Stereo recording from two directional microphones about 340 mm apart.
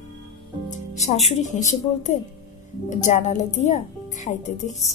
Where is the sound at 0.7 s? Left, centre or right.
Centre.